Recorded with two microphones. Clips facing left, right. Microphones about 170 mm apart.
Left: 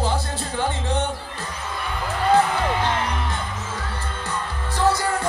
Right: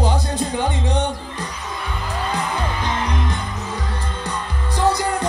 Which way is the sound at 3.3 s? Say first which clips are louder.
Right 2 dB; 15° right (ahead or behind).